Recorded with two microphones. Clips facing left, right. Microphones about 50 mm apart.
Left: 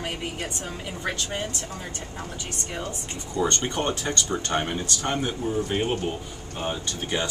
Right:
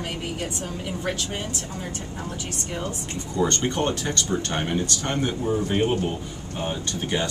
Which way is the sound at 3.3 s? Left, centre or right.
Centre.